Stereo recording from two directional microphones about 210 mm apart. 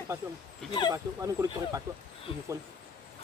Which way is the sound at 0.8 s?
15° right (ahead or behind).